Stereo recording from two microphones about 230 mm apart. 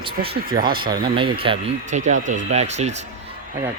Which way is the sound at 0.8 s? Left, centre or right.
Right.